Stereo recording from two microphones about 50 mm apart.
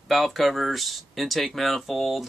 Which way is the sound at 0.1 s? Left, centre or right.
Centre.